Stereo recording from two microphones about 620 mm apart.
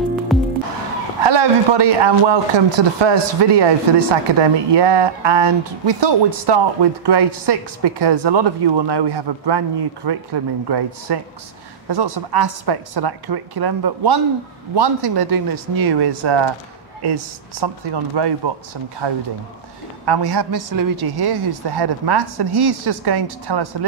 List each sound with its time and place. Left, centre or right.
0.3 s music: centre
1.2 s a man's voice: right